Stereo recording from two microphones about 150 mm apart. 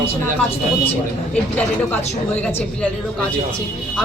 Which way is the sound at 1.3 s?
10° left (ahead or behind).